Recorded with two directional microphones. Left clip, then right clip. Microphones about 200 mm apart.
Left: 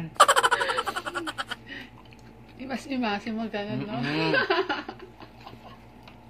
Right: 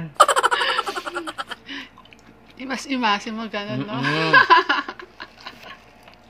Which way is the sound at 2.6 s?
40° right (ahead or behind).